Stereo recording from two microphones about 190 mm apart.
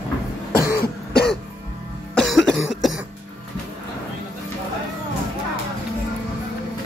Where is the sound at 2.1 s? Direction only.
Centre (ahead or behind).